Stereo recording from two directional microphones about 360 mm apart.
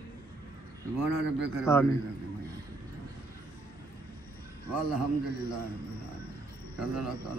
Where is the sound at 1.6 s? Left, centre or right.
Centre.